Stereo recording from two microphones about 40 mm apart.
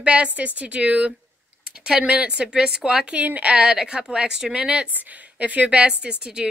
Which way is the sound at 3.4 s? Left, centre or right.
Right.